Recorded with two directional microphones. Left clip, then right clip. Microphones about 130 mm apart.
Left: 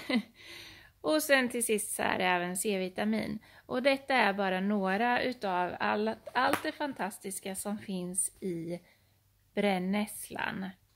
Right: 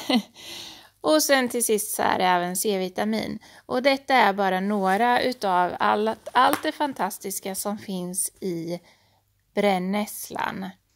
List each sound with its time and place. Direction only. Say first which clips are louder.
0.0 s speech: right 9 dB; 60° right (ahead or behind); by 10.8 s 40° right (ahead or behind)